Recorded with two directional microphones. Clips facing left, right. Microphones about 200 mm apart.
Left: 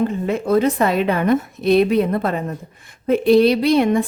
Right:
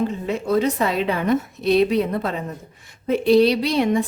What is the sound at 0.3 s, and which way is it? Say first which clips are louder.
A woman's voice: left 3 dB; 55° left (ahead or behind).